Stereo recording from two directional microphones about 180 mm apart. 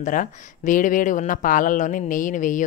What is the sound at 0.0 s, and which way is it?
A woman's voice, 45° left (ahead or behind).